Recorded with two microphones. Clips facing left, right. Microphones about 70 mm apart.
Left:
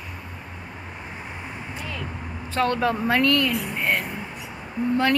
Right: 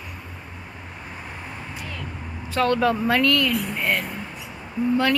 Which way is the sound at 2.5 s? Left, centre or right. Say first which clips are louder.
Right 2 dB; left.